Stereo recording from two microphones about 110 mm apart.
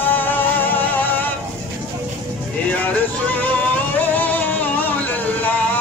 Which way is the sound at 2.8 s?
15° left (ahead or behind).